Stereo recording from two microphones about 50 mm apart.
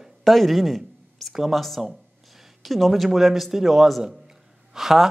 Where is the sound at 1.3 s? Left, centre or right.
Centre.